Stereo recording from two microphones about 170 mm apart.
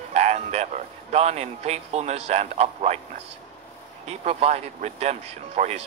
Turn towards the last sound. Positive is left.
turn(degrees=-40)  # may be behind; listen again after turning